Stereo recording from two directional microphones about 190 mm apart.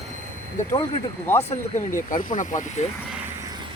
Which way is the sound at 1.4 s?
35° left (ahead or behind).